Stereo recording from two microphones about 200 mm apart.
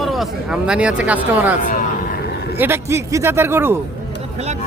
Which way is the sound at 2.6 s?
10° right (ahead or behind).